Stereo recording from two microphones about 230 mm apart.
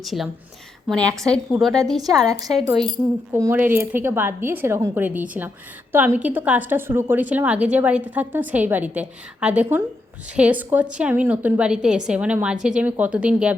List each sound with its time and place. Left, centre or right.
0.0 s a woman's voice: centre
2.0 s a woman's voice: centre